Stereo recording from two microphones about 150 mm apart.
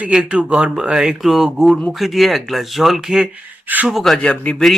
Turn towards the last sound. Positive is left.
turn(degrees=5)  # may be behind; listen again after turning